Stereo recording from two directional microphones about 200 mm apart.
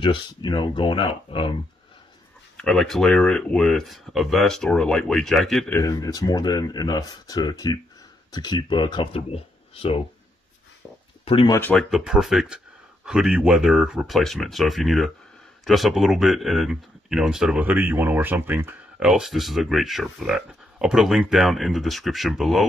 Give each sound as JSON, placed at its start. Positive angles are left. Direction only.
{"t": 0.0, "sound": "speech", "side_deg": 25}
{"t": 2.5, "sound": "speech", "side_deg": 0}
{"t": 5.8, "sound": "speech", "side_deg": 20}
{"t": 11.2, "sound": "speech", "side_deg": 25}
{"t": 11.5, "sound": "speech", "side_deg": 10}
{"t": 11.9, "sound": "speech", "side_deg": 0}